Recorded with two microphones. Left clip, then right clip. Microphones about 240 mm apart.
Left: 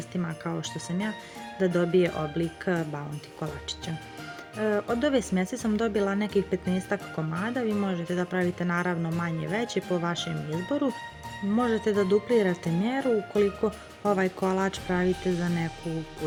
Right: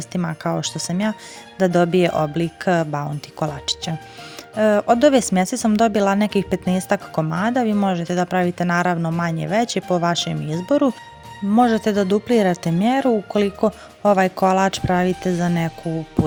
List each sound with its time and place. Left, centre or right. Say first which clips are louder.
0.1 s speech: right 11 dB; right